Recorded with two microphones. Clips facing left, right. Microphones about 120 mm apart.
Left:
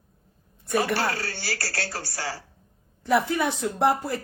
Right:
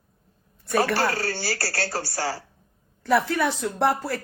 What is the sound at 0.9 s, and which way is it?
Speech, 35° right (ahead or behind).